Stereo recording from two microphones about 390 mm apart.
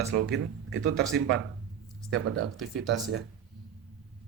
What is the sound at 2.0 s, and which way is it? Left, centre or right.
Speech, right.